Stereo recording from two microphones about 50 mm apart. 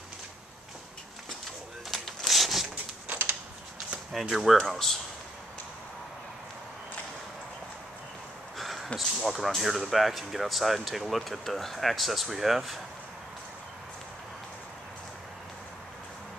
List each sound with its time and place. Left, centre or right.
1.9 s zipper: centre
3.1 s a sound: right
4.1 s speech: centre
8.5 s speech: centre